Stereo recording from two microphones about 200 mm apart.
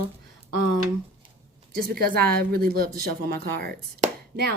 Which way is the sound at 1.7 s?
50° right (ahead or behind).